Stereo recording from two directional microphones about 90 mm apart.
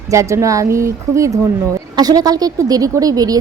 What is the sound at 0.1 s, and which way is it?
A woman's voice, 35° right (ahead or behind).